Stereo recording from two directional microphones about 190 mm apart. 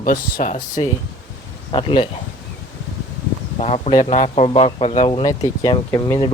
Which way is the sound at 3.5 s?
35° left (ahead or behind).